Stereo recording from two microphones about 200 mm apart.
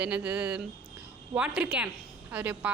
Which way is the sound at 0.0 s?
5° right (ahead or behind).